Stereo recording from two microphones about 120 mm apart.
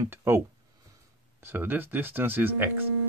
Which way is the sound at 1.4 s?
20° right (ahead or behind).